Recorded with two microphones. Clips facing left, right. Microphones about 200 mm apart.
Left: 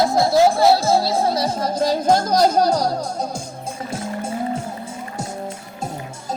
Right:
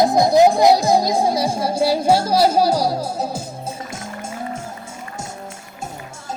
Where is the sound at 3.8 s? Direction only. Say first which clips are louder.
Left 5 dB; 35° left (ahead or behind).